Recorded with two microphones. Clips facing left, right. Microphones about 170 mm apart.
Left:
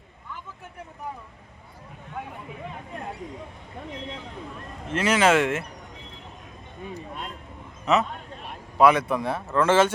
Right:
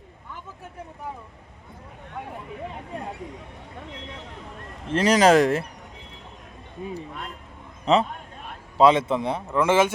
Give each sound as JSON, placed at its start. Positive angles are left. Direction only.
{"t": 4.9, "sound": "speech", "side_deg": -35}
{"t": 7.9, "sound": "speech", "side_deg": -30}